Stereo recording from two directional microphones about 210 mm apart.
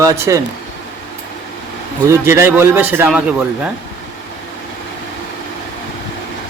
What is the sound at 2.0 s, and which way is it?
A man's voice, 15° right (ahead or behind).